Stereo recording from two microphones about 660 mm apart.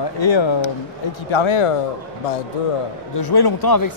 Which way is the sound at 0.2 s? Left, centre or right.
Left.